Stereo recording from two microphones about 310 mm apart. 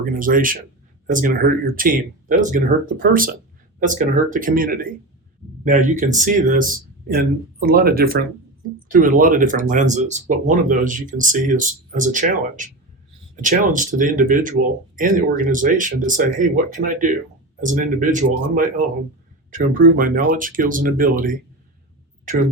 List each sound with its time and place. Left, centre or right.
0.0 s speech: right